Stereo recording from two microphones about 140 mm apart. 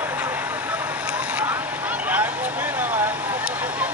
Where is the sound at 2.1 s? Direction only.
10° right (ahead or behind).